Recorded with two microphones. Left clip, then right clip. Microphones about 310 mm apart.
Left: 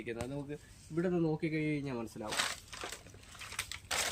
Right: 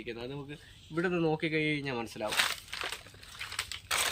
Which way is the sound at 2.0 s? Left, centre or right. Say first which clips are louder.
Right 6 dB; centre.